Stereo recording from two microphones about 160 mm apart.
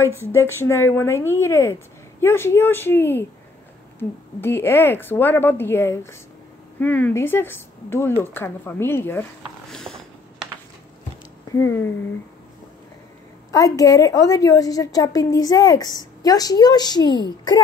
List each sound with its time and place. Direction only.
0.3 s speech: 15° left (ahead or behind)
4.4 s speech: 15° left (ahead or behind)
9.7 s a sound: 5° left (ahead or behind)
11.5 s speech: 15° left (ahead or behind)
13.5 s a woman's voice: 20° left (ahead or behind)